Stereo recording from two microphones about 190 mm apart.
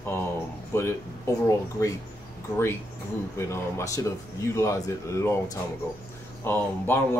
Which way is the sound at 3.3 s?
15° left (ahead or behind).